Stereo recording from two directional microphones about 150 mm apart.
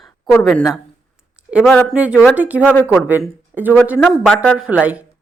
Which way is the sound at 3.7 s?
10° right (ahead or behind).